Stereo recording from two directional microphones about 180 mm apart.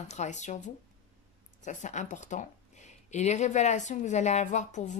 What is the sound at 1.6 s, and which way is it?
Speech, 45° left (ahead or behind).